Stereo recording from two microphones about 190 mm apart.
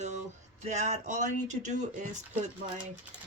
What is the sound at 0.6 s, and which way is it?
Speech, 40° right (ahead or behind).